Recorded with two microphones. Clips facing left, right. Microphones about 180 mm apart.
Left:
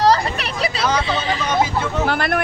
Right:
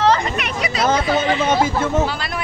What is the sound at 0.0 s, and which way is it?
Hubbub, 35° left (ahead or behind).